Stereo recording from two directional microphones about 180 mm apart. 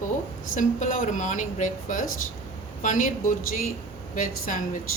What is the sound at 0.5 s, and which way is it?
Speech, 45° left (ahead or behind).